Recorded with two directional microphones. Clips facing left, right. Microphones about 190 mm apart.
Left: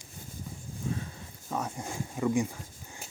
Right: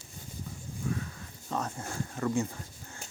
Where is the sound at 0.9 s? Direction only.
25° left (ahead or behind).